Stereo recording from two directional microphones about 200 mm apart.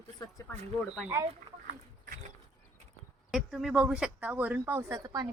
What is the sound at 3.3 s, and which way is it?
Speech, centre (ahead or behind).